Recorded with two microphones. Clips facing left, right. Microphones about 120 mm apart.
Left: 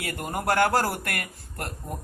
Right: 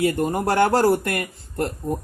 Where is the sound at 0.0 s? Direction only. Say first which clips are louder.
Right 9 dB; 25° right (ahead or behind).